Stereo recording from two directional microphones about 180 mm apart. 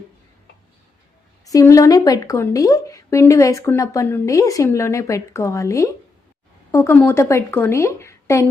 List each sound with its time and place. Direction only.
1.5 s speech: 20° left (ahead or behind)